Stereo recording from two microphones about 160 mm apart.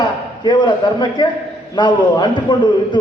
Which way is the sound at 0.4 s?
30° left (ahead or behind).